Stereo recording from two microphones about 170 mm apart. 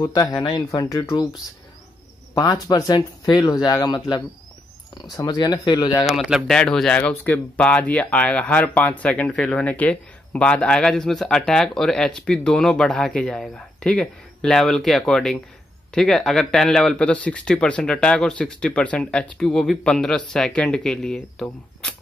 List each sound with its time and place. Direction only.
0.0 s speech: 20° left (ahead or behind)
2.3 s speech: 25° left (ahead or behind)
6.0 s speech: centre (ahead or behind)